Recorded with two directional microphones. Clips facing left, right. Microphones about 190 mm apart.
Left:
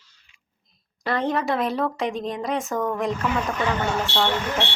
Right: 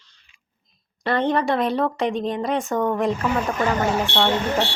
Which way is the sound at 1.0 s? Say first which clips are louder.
Right 3 dB; centre (ahead or behind).